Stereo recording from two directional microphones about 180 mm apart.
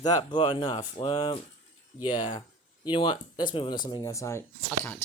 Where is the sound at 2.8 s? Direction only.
25° left (ahead or behind).